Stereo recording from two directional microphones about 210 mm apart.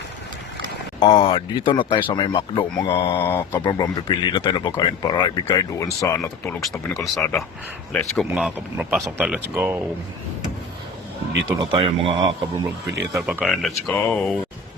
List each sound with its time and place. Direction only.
0.9 s speech: 25° left (ahead or behind)
3.2 s speech: 10° left (ahead or behind)
6.9 s speech: centre (ahead or behind)
11.7 s speech: 25° right (ahead or behind)
13.1 s speech: 5° right (ahead or behind)